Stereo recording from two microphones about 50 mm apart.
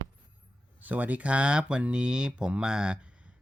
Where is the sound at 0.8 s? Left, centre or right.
Right.